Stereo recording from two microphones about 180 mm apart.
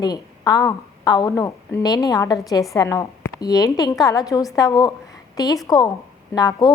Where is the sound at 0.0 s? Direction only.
20° left (ahead or behind).